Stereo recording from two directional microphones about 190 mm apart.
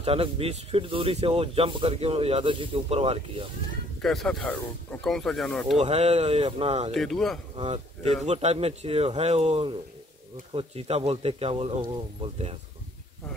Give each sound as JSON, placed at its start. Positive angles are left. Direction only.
{"t": 0.0, "sound": "speech", "side_deg": -30}
{"t": 4.0, "sound": "speech", "side_deg": 0}
{"t": 5.8, "sound": "speech", "side_deg": -35}
{"t": 6.9, "sound": "speech", "side_deg": 0}
{"t": 7.5, "sound": "speech", "side_deg": -30}